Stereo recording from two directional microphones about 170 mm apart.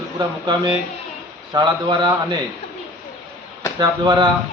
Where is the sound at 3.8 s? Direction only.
25° right (ahead or behind).